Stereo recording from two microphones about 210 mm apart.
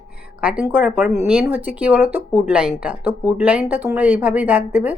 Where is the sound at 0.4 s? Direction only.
5° right (ahead or behind).